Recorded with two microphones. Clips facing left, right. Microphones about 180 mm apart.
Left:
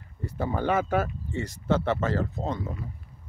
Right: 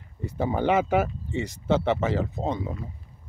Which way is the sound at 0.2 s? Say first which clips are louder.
Right 3 dB; 15° right (ahead or behind).